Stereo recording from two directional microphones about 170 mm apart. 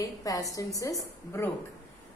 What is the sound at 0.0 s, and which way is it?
A woman's voice, 20° left (ahead or behind).